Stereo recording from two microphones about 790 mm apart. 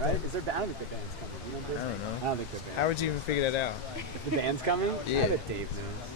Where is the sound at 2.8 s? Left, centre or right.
Left.